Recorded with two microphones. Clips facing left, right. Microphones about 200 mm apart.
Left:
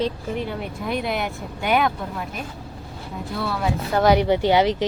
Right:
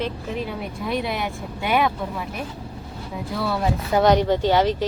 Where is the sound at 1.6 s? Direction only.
Centre (ahead or behind).